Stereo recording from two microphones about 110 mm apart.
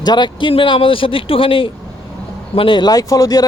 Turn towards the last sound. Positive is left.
turn(degrees=35)  # may be behind; listen again after turning